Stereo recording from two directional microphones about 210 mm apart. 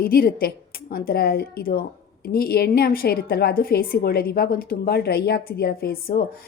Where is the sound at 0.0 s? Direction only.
45° left (ahead or behind).